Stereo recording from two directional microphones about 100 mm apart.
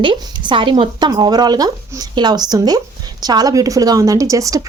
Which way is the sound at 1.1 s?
40° right (ahead or behind).